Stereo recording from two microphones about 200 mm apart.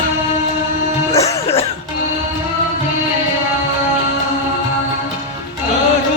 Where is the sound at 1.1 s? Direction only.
15° left (ahead or behind).